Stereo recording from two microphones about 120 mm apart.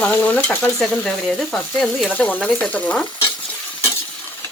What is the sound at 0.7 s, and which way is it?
Stir, 5° left (ahead or behind).